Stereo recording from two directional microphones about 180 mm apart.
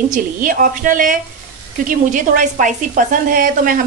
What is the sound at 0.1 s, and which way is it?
A woman's voice, 50° right (ahead or behind).